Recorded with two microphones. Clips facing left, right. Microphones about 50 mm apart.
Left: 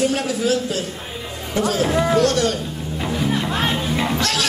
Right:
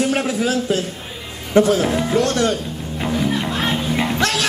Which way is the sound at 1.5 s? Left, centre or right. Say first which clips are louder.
Right 4 dB; right.